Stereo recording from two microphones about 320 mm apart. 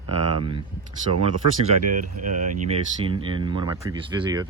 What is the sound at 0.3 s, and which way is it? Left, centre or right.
Speech, centre.